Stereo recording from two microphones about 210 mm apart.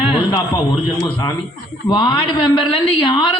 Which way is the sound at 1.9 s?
20° left (ahead or behind).